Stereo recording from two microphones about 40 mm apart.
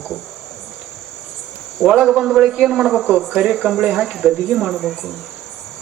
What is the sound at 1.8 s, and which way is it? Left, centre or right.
Speech, centre.